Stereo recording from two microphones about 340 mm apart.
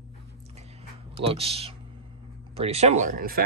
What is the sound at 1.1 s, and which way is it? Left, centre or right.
Speech, centre.